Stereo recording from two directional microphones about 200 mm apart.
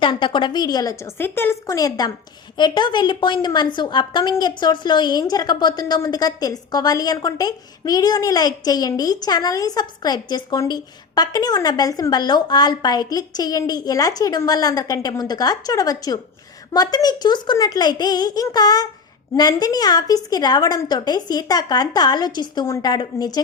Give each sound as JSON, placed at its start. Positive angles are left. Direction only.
{"t": 0.0, "sound": "a woman's voice", "side_deg": 25}